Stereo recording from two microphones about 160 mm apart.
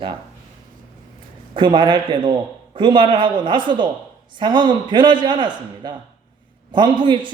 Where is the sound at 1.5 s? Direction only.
30° right (ahead or behind).